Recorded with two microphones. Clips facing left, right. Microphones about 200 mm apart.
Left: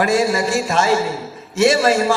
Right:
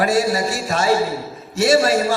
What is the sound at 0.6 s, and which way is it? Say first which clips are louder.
A man's voice: left 1 dB; 45° right (ahead or behind).